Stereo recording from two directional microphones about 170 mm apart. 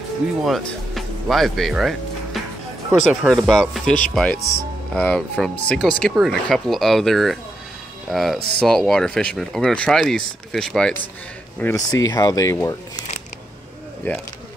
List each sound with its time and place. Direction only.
0.4 s speech: centre (ahead or behind)
3.0 s speech: centre (ahead or behind)
11.6 s speech: 20° left (ahead or behind)
14.0 s speech: 10° left (ahead or behind)